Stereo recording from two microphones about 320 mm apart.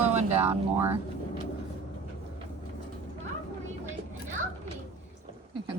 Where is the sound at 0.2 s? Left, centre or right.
Centre.